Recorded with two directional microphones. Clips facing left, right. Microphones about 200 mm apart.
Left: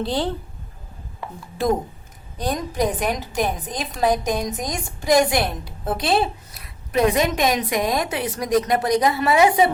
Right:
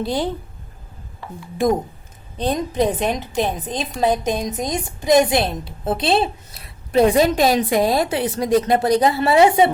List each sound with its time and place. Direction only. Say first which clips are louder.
0.0 s a woman's voice: right 1 dB; 10° right (ahead or behind)
1.5 s a woman's voice: right 3 dB; 15° right (ahead or behind)